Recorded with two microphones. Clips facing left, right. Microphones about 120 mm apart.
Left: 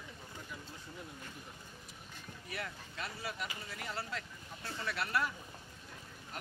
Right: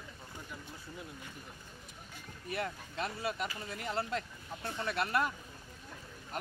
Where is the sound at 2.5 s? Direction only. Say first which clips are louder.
Right 7 dB; 25° right (ahead or behind).